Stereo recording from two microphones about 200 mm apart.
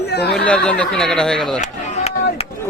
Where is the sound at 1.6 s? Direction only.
35° left (ahead or behind).